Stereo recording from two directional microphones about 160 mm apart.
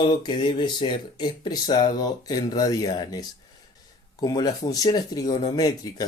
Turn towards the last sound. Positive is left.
turn(degrees=25)  # may be behind; listen again after turning